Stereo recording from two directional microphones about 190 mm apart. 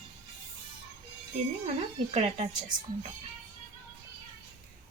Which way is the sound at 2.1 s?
35° right (ahead or behind).